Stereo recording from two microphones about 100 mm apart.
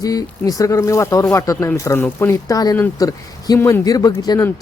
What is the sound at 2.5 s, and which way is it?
Speech, 35° left (ahead or behind).